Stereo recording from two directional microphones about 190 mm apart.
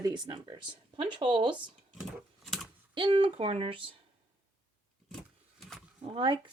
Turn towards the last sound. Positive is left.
turn(degrees=-25)  # may be behind; listen again after turning